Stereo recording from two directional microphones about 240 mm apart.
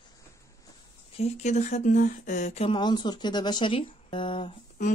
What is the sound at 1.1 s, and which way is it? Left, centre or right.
Speech, left.